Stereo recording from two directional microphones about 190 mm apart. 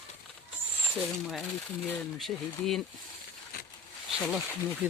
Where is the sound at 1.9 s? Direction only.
Centre (ahead or behind).